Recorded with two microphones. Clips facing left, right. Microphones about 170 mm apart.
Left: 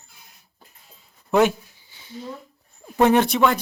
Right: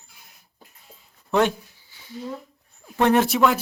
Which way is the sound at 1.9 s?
20° left (ahead or behind).